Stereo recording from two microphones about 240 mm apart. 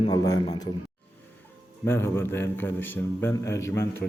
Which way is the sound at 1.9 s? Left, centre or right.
Centre.